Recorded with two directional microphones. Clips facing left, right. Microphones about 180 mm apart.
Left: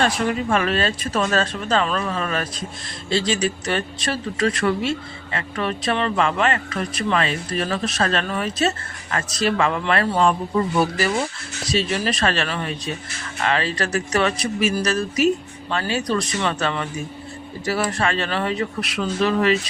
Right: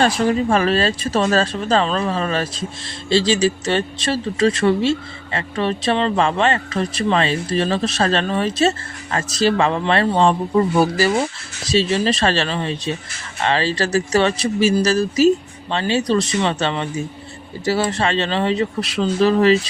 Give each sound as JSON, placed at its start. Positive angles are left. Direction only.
{"t": 0.0, "sound": "speech", "side_deg": -35}